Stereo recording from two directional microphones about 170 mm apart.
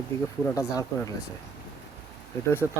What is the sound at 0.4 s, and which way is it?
Speech, 20° left (ahead or behind).